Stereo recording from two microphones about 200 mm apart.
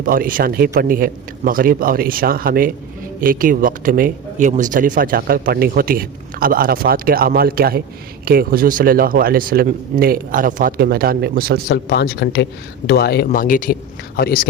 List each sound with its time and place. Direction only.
0.0 s speech: 45° right (ahead or behind)
11.7 s speech: 55° left (ahead or behind)